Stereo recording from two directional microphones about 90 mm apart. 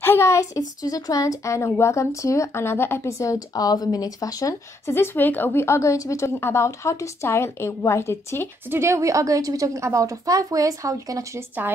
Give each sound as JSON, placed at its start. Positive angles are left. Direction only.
{"t": 0.0, "sound": "a woman's voice", "side_deg": 30}
{"t": 0.6, "sound": "speech", "side_deg": 45}
{"t": 4.9, "sound": "speech", "side_deg": 25}
{"t": 8.6, "sound": "speech", "side_deg": -30}